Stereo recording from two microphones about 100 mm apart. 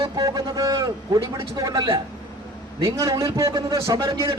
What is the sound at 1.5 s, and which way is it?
Speech, 45° right (ahead or behind).